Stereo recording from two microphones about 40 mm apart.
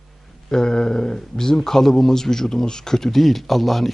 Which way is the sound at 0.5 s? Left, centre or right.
Centre.